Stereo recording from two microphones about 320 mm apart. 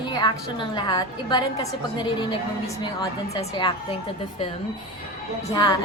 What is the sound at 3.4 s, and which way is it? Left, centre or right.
Speech, centre.